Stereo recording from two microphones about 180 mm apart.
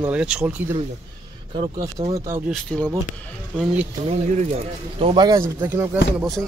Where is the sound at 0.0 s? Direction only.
5° right (ahead or behind).